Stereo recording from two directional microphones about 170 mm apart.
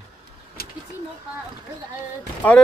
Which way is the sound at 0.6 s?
65° left (ahead or behind).